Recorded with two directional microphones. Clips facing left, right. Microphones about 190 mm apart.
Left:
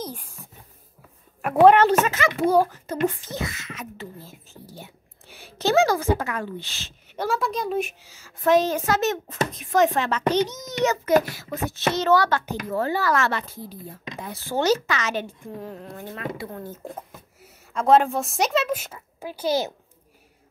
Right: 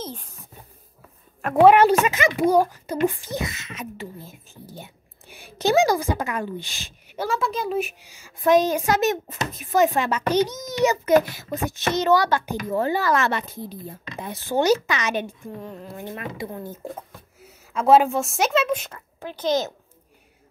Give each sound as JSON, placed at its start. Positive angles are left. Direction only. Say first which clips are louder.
{"t": 0.0, "sound": "a sound", "louder": "even", "side_deg": 10}
{"t": 1.4, "sound": "a woman's voice", "louder": "even", "side_deg": 5}
{"t": 1.7, "sound": "a woman's voice", "louder": "right 1 dB", "side_deg": -10}
{"t": 7.2, "sound": "a woman's voice", "louder": "even", "side_deg": 0}
{"t": 8.0, "sound": "speech", "louder": "right 1 dB", "side_deg": -15}
{"t": 15.6, "sound": "a woman's voice", "louder": "even", "side_deg": 0}
{"t": 16.0, "sound": "a woman's voice", "louder": "right 1 dB", "side_deg": -20}